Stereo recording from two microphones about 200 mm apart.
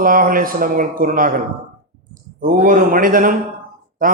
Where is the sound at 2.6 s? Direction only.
40° right (ahead or behind).